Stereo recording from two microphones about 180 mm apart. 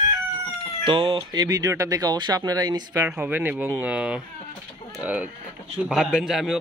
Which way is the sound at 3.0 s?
5° right (ahead or behind).